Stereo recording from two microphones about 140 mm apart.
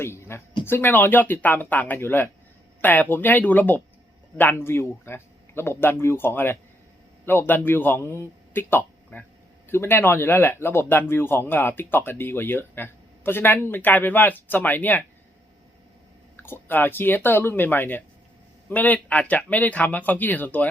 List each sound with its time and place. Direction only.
0.0 s a sound: 20° left (ahead or behind)
0.6 s speech: 15° left (ahead or behind)
16.4 s speech: 15° left (ahead or behind)